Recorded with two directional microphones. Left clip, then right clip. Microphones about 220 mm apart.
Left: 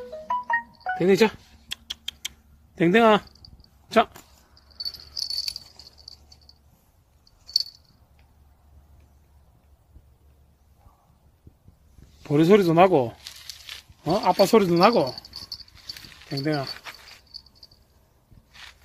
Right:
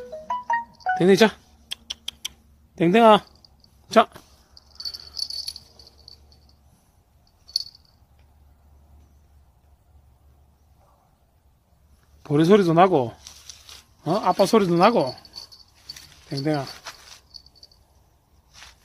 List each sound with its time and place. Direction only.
0.3 s music: 30° right (ahead or behind)
0.9 s speech: 15° right (ahead or behind)
1.7 s a sound: centre (ahead or behind)
3.4 s a sound: 15° right (ahead or behind)
12.2 s speech: centre (ahead or behind)
16.3 s speech: 5° right (ahead or behind)